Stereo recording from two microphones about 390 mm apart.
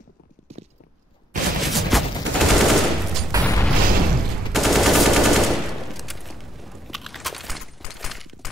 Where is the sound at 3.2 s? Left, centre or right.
Centre.